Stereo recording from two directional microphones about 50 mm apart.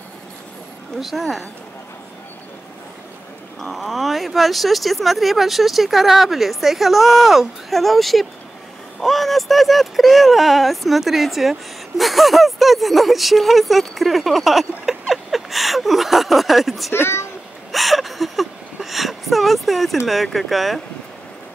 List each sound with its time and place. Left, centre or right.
1.0 s speech: centre
3.6 s speech: centre
16.9 s speech: left
17.6 s speech: centre